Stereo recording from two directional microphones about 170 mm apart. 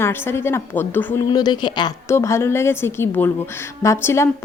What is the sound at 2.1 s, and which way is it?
Speech, 15° left (ahead or behind).